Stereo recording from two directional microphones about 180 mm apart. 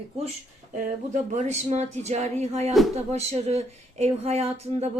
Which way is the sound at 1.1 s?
40° right (ahead or behind).